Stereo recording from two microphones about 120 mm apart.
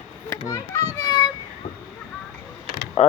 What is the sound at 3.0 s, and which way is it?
Mechanisms, 65° left (ahead or behind).